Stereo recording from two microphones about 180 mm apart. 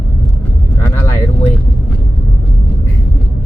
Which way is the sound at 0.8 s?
15° left (ahead or behind).